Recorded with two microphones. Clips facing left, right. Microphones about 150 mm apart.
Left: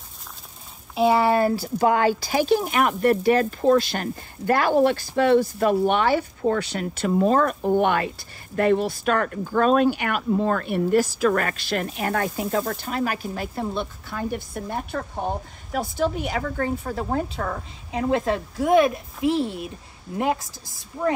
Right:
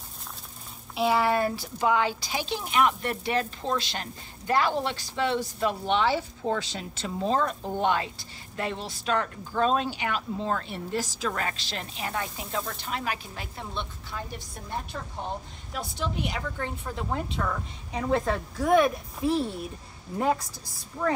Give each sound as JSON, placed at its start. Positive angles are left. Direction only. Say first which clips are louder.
{"t": 0.9, "sound": "speech", "louder": "left 5 dB", "side_deg": 30}
{"t": 1.6, "sound": "a woman's voice", "louder": "left 5 dB", "side_deg": 45}
{"t": 14.1, "sound": "speech", "louder": "left 8 dB", "side_deg": 60}
{"t": 14.5, "sound": "a woman's voice", "louder": "left 11 dB", "side_deg": 70}
{"t": 14.9, "sound": "a woman's voice", "louder": "left 7 dB", "side_deg": 50}
{"t": 18.0, "sound": "a woman's voice", "louder": "left 4 dB", "side_deg": 25}
{"t": 19.2, "sound": "a child's voice", "louder": "left 4 dB", "side_deg": 90}
{"t": 21.0, "sound": "speech", "louder": "left 4 dB", "side_deg": 10}